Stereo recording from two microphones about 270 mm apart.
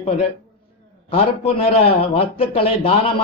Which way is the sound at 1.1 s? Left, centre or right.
Left.